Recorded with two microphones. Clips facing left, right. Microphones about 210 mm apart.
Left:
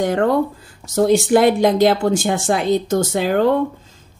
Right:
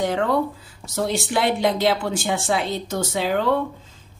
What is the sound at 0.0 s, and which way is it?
Speech, 50° left (ahead or behind).